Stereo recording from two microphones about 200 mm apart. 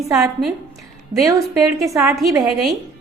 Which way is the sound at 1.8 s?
Centre (ahead or behind).